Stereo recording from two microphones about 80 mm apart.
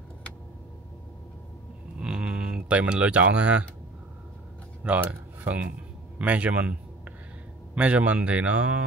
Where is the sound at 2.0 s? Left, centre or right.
Centre.